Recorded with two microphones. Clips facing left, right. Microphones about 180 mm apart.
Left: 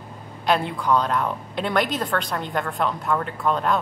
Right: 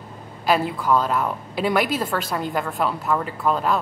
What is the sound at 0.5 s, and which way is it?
A woman's voice, 5° right (ahead or behind).